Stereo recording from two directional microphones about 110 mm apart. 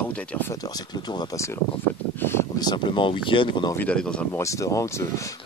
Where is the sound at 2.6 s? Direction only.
45° left (ahead or behind).